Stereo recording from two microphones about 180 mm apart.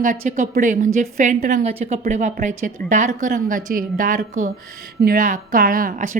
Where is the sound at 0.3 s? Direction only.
45° right (ahead or behind).